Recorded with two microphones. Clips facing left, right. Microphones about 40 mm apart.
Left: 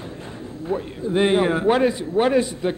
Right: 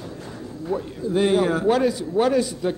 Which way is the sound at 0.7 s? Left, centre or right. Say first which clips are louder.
Left 1 dB; left.